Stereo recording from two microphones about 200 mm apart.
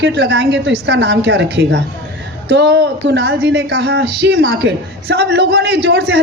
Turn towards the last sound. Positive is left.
turn(degrees=-60)  # may be behind; listen again after turning